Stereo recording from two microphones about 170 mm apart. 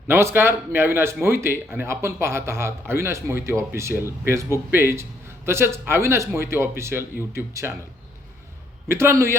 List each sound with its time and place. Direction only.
0.1 s speech: 15° right (ahead or behind)
8.9 s speech: 15° right (ahead or behind)